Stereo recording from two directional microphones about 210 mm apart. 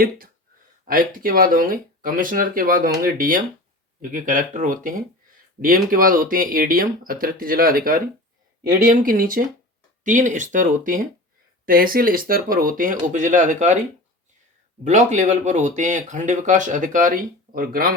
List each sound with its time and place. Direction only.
0.9 s speech: 40° right (ahead or behind)
14.8 s speech: 35° right (ahead or behind)